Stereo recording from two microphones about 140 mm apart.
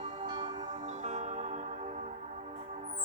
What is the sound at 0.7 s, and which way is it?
Music, 55° right (ahead or behind).